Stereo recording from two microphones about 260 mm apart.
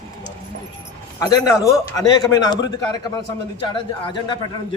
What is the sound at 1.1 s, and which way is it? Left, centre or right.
A man's voice, centre.